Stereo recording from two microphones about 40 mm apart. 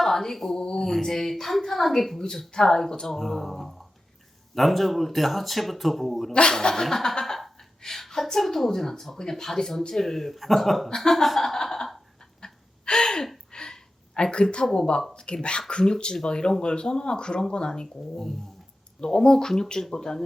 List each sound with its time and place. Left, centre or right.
0.0 s a sound: centre
0.6 s speech: centre
0.9 s speech: centre
6.5 s speech: centre
6.8 s a sound: centre
7.8 s speech: centre
10.8 s speech: centre
12.4 s gasp: centre
13.5 s a sound: centre
14.2 s speech: left
18.9 s speech: centre